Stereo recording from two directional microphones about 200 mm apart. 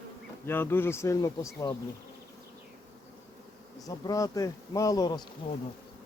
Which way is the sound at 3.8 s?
20° left (ahead or behind).